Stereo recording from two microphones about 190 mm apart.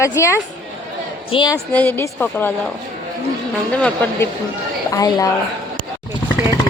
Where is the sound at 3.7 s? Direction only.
10° left (ahead or behind).